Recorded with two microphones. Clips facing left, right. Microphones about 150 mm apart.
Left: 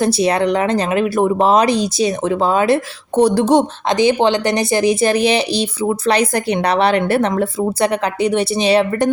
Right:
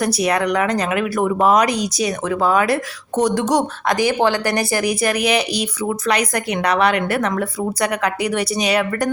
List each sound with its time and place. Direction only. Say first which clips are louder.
0.0 s speech: left 3 dB; 30° left (ahead or behind)